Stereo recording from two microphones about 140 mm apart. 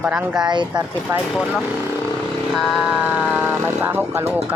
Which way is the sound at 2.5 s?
5° right (ahead or behind).